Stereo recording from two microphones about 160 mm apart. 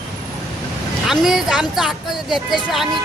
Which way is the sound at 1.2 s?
Centre (ahead or behind).